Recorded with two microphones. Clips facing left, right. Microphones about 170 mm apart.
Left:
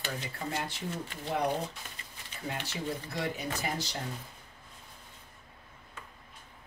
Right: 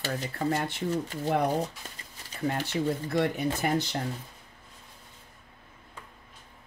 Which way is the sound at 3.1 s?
55° right (ahead or behind).